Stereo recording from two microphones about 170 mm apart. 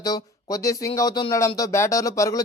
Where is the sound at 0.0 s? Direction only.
20° left (ahead or behind).